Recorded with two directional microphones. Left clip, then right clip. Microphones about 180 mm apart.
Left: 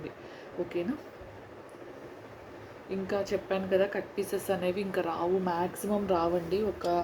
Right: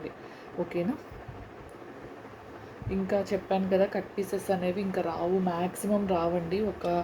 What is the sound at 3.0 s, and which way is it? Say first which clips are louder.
A woman's voice: right 2 dB; 5° left (ahead or behind).